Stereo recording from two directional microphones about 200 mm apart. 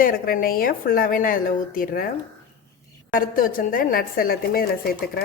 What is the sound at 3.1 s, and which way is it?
A woman's voice, 45° left (ahead or behind).